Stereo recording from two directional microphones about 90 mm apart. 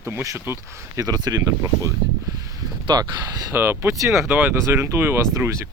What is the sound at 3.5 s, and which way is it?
Speech, 25° right (ahead or behind).